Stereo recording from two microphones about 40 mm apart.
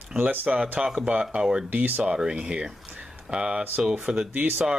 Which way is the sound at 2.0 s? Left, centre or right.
Right.